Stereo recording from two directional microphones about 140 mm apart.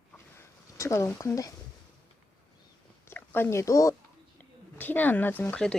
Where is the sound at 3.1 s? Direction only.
15° left (ahead or behind).